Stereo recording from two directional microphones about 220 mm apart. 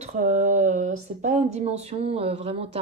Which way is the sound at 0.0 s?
30° right (ahead or behind).